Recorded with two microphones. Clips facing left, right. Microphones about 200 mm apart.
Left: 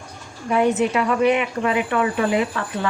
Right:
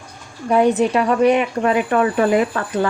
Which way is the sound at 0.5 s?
35° right (ahead or behind).